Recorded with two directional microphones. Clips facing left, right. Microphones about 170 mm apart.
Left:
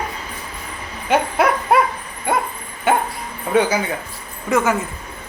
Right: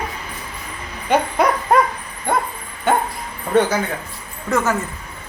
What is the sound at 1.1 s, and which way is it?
Dog, 5° left (ahead or behind).